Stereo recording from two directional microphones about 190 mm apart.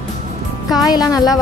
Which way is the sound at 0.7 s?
20° left (ahead or behind).